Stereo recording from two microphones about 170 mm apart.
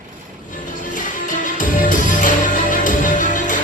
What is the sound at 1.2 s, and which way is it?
Music, 50° left (ahead or behind).